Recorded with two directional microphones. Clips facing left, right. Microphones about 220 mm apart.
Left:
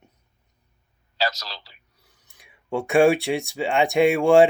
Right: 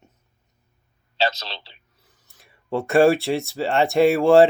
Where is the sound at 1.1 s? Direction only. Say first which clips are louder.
Right 3 dB; 25° right (ahead or behind).